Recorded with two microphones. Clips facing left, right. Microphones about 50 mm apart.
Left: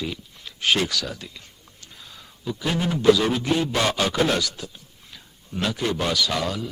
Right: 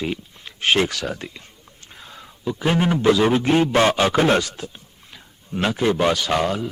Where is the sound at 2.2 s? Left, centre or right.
Right.